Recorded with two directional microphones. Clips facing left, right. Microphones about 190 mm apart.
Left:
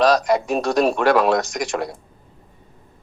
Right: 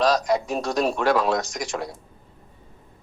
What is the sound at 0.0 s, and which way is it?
Speech, 70° left (ahead or behind).